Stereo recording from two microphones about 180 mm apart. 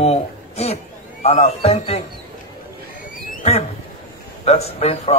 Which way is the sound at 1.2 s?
35° left (ahead or behind).